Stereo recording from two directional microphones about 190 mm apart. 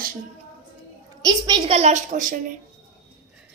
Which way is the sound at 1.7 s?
35° right (ahead or behind).